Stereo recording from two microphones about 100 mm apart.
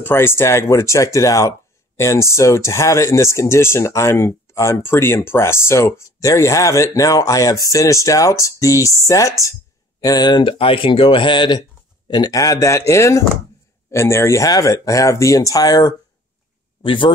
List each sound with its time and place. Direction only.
0.0 s speech: 25° left (ahead or behind)
10.0 s speech: 45° left (ahead or behind)
12.1 s speech: 40° left (ahead or behind)
16.8 s speech: 60° left (ahead or behind)